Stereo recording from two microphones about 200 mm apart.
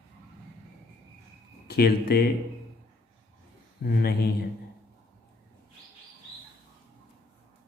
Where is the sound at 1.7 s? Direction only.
50° left (ahead or behind).